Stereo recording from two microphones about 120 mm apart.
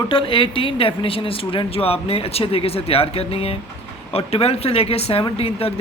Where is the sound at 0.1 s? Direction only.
45° left (ahead or behind).